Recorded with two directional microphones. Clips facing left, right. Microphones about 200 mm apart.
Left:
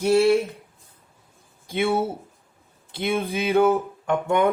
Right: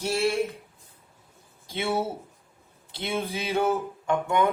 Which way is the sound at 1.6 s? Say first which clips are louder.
Left 7 dB; 55° left (ahead or behind).